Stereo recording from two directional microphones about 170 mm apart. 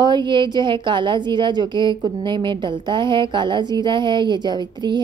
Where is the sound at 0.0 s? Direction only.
25° right (ahead or behind).